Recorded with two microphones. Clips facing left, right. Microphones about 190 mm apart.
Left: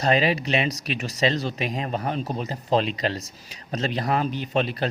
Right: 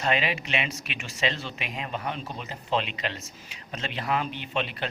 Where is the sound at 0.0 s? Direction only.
35° left (ahead or behind).